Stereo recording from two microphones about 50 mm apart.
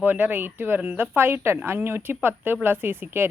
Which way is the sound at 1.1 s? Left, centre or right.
Right.